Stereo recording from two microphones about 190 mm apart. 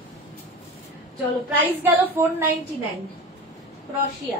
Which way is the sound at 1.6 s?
10° right (ahead or behind).